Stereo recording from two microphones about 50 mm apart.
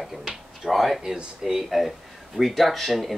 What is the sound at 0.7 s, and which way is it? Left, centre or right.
Speech, centre.